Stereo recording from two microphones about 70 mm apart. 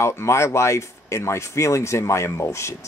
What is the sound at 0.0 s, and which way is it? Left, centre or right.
Speech, left.